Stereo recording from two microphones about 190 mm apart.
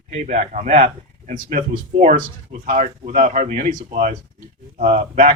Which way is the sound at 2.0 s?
45° right (ahead or behind).